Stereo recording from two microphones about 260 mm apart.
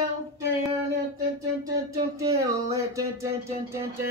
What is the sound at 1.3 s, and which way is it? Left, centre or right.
Speech, centre.